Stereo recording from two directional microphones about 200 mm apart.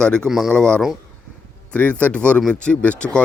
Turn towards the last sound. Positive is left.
turn(degrees=5)  # may be behind; listen again after turning